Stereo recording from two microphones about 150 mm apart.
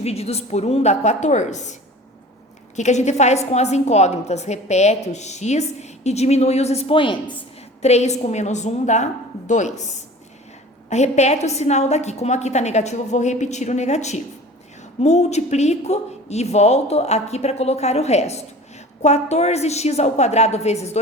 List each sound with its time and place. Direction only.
0.0 s a woman's voice: 45° left (ahead or behind)
2.7 s a woman's voice: 50° left (ahead or behind); by 7.4 s 35° left (ahead or behind)
7.8 s a woman's voice: 45° left (ahead or behind)